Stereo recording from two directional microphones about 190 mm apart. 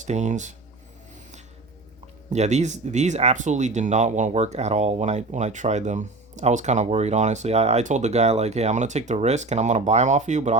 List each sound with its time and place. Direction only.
0.0 s speech: 40° right (ahead or behind)
2.3 s speech: 35° right (ahead or behind)